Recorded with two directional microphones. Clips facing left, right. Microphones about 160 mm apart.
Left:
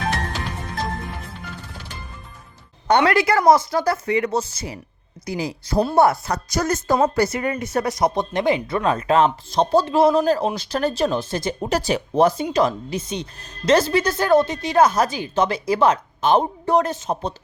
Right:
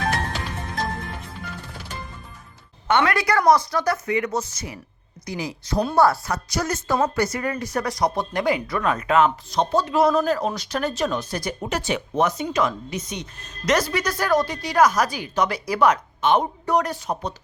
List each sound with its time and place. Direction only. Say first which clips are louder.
2.8 s speech: left 4 dB; 35° left (ahead or behind)
6.3 s speech: left 3 dB; 45° left (ahead or behind)
7.2 s speech: left 3 dB; 25° left (ahead or behind)
11.7 s speech: left 4 dB; 35° left (ahead or behind)